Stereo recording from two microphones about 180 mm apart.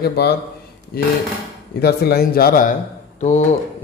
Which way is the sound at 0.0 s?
60° left (ahead or behind).